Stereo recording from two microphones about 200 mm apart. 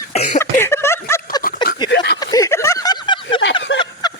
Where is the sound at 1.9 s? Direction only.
60° left (ahead or behind).